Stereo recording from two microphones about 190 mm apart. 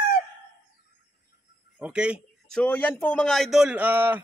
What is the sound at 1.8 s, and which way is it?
A man's voice, 5° right (ahead or behind).